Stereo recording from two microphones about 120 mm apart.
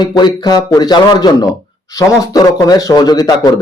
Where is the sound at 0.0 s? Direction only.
35° left (ahead or behind).